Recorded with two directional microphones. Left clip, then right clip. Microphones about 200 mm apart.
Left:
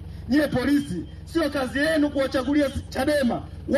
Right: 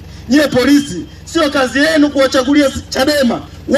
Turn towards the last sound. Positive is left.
turn(degrees=-35)  # may be behind; listen again after turning